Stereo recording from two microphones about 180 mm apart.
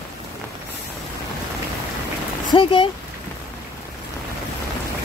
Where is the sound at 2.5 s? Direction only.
30° left (ahead or behind).